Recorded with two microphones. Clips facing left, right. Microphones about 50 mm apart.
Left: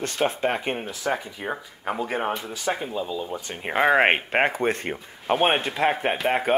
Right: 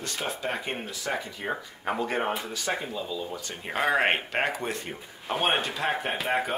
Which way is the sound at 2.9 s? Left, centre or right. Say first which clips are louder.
Left 4 dB; left.